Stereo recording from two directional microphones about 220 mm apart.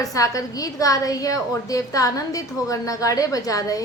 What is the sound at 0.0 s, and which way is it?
A woman's voice, 15° left (ahead or behind).